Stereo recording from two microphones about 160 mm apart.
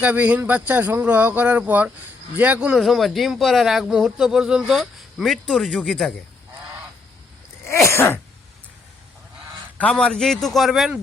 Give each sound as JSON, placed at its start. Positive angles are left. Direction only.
{"t": 0.0, "sound": "speech", "side_deg": -10}
{"t": 7.7, "sound": "sneeze", "side_deg": 15}
{"t": 9.7, "sound": "speech", "side_deg": 5}